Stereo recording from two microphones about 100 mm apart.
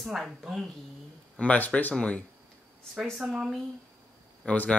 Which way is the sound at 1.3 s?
15° left (ahead or behind).